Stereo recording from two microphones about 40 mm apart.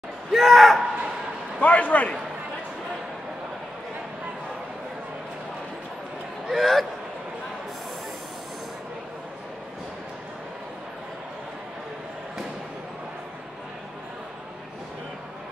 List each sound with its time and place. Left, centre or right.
0.3 s speech: centre
1.6 s a man's voice: left
6.5 s speech: centre